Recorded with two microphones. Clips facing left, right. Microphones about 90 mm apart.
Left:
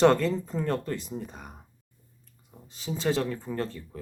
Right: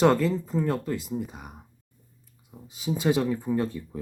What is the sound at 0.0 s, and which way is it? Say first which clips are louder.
Speech: even; 5° right (ahead or behind).